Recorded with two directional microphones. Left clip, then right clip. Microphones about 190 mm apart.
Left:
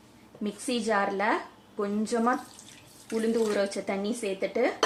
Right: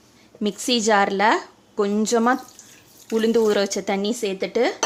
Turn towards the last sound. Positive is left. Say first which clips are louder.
# right 6 dB
turn(degrees=-50)  # may be behind; listen again after turning